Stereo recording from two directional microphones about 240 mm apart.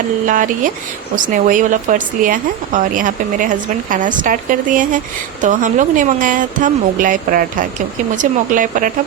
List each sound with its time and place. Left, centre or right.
0.3 s speech: right